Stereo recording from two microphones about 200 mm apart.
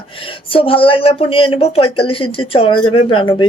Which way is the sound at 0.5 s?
25° left (ahead or behind).